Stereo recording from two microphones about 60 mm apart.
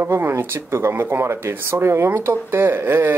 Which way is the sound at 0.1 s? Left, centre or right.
Right.